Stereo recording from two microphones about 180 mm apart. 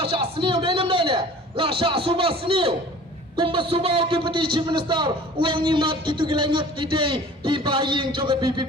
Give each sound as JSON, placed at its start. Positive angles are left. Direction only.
{"t": 0.0, "sound": "a man's voice", "side_deg": -30}